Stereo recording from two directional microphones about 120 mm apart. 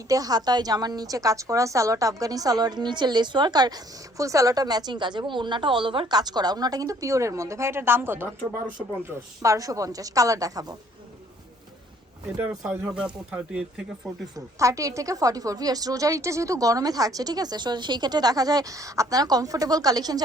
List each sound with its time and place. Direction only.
0.1 s a woman's voice: 30° right (ahead or behind)
12.9 s speech: 10° right (ahead or behind)
14.3 s a woman's voice: 25° right (ahead or behind)